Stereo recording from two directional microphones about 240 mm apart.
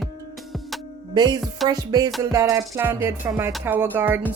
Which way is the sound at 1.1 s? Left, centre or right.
Centre.